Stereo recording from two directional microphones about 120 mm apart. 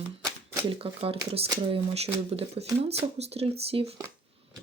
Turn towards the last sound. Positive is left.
turn(degrees=-55)  # may be behind; listen again after turning